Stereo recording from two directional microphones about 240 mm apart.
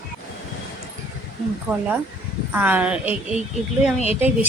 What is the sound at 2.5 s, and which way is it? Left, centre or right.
Speech, centre.